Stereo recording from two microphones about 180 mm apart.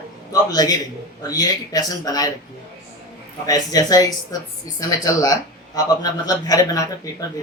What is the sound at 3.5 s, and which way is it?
Speech, 20° left (ahead or behind).